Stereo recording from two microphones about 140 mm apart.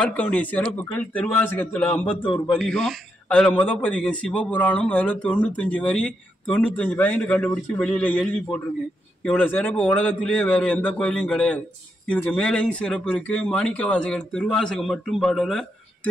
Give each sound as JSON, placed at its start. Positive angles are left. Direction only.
{"t": 0.0, "sound": "a man's voice", "side_deg": 10}
{"t": 2.2, "sound": "a man's voice", "side_deg": 35}
{"t": 2.5, "sound": "a man's voice", "side_deg": 5}